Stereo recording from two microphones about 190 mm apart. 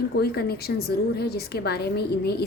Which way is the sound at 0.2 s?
55° left (ahead or behind).